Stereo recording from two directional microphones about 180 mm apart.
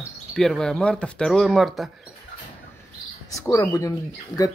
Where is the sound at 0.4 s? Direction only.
Centre (ahead or behind).